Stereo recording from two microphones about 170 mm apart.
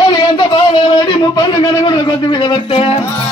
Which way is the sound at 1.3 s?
25° left (ahead or behind).